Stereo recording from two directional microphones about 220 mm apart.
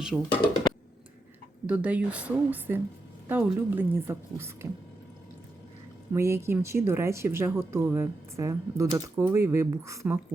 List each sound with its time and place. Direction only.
0.0 s speech: centre (ahead or behind)
1.6 s speech: 5° right (ahead or behind)
6.1 s speech: 10° right (ahead or behind)